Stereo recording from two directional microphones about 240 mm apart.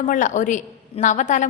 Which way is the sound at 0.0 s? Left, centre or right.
Left.